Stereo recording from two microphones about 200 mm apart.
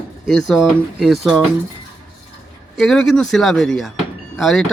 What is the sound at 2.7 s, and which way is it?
Speech, centre (ahead or behind).